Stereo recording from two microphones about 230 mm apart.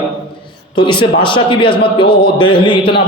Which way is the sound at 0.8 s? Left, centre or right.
Left.